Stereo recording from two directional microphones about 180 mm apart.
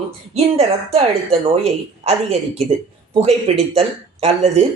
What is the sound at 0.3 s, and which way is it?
Speech, 35° right (ahead or behind).